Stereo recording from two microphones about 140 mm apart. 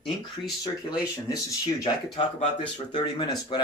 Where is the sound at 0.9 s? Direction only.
35° left (ahead or behind).